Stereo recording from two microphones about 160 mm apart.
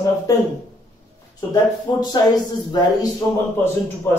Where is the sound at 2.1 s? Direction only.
25° left (ahead or behind).